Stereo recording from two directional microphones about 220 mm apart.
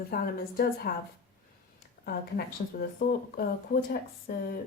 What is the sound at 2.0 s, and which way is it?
Speech, 45° left (ahead or behind).